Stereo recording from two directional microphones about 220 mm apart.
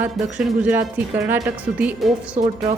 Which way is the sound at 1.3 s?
10° right (ahead or behind).